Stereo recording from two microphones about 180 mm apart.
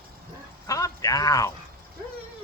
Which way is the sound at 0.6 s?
20° left (ahead or behind).